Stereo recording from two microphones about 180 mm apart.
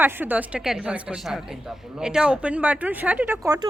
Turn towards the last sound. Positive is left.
turn(degrees=-20)  # may be behind; listen again after turning